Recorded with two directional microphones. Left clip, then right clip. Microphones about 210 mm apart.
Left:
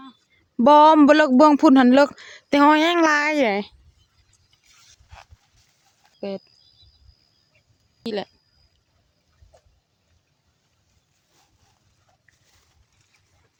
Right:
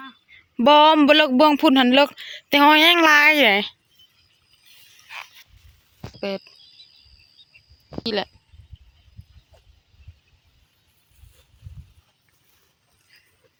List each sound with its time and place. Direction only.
0.5 s speech: 25° left (ahead or behind)
6.1 s speech: centre (ahead or behind)
8.0 s speech: centre (ahead or behind)